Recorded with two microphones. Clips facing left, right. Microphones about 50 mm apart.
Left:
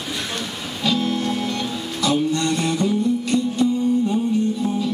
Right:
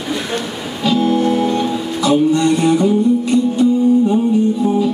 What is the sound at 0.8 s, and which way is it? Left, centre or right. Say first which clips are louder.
Music: right 7 dB; centre.